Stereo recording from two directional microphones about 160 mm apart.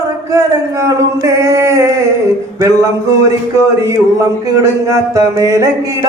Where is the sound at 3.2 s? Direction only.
20° right (ahead or behind).